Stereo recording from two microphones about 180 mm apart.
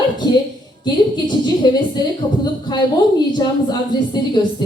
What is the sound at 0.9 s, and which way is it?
Speech, 25° left (ahead or behind).